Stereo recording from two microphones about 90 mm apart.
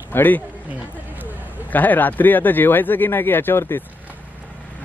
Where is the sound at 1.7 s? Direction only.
20° left (ahead or behind).